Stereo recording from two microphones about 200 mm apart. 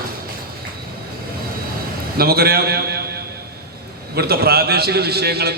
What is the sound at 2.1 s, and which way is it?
Speech, 50° right (ahead or behind).